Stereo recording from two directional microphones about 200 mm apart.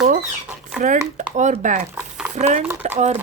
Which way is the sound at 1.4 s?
35° right (ahead or behind).